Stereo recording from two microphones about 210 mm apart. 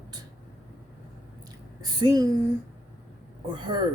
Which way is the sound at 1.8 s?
20° right (ahead or behind).